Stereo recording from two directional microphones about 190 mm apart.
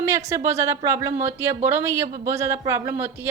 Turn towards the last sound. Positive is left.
turn(degrees=-10)  # may be behind; listen again after turning